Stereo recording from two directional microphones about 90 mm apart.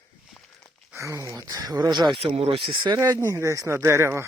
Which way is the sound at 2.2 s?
75° right (ahead or behind).